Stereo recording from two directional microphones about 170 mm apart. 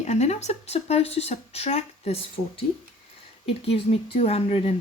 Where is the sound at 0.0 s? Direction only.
40° left (ahead or behind).